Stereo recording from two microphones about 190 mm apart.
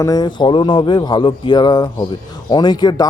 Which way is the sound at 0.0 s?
20° left (ahead or behind).